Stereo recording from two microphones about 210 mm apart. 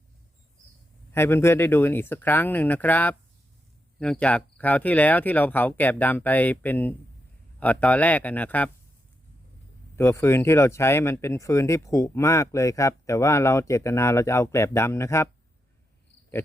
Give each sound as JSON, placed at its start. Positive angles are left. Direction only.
{"t": 1.1, "sound": "speech", "side_deg": 10}
{"t": 9.9, "sound": "speech", "side_deg": 10}